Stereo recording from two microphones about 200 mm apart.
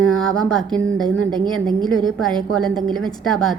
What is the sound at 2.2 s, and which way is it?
A woman's voice, 5° left (ahead or behind).